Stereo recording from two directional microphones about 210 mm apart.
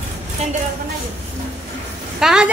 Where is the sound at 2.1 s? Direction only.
5° right (ahead or behind).